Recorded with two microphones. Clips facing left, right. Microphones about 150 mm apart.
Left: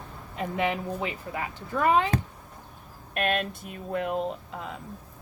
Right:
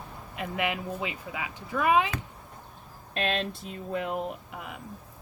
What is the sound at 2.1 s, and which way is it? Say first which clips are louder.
Speech: left 8 dB; 35° left (ahead or behind).